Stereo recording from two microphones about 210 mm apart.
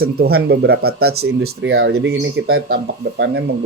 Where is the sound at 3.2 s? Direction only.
55° right (ahead or behind).